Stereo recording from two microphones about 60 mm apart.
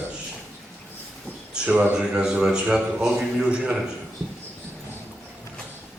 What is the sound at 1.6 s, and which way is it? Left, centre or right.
A man's voice, centre.